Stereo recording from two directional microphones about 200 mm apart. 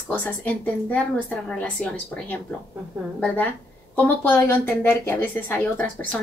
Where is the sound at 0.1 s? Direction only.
10° left (ahead or behind).